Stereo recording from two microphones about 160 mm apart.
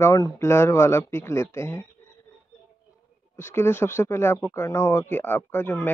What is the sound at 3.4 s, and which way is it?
Speech, 15° left (ahead or behind).